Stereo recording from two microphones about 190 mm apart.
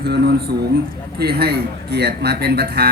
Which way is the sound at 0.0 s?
60° right (ahead or behind).